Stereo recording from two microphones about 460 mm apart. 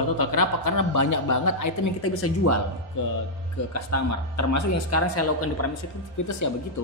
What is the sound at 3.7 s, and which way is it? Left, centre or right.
A man's voice, left.